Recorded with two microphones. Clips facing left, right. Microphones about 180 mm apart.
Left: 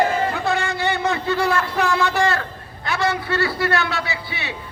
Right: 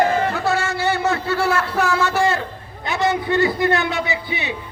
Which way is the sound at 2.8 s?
20° right (ahead or behind).